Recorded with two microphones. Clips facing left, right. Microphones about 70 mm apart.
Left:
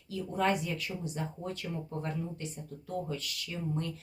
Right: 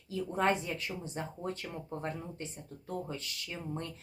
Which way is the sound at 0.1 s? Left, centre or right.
Right.